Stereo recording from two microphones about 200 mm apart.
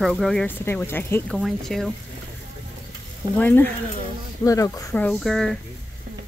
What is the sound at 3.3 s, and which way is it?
Speech, 10° left (ahead or behind).